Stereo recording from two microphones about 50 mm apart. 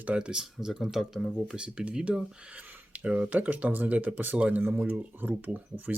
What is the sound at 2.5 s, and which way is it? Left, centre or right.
Speech, right.